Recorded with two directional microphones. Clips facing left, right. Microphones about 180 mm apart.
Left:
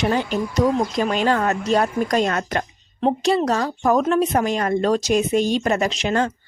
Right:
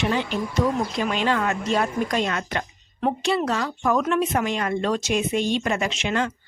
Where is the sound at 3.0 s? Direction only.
35° left (ahead or behind).